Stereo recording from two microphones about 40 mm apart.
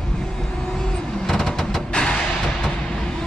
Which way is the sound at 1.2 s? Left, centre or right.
Centre.